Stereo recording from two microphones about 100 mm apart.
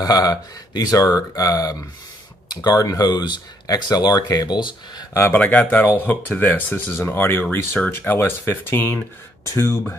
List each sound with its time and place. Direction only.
0.0 s speech: 40° left (ahead or behind)
5.1 s speech: 20° left (ahead or behind)